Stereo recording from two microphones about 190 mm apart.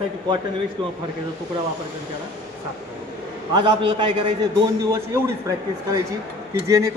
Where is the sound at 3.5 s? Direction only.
25° right (ahead or behind).